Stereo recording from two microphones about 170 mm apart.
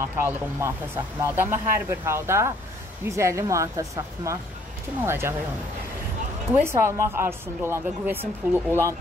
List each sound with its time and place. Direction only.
0.2 s a woman's voice: 15° right (ahead or behind)
6.5 s a woman's voice: 15° right (ahead or behind)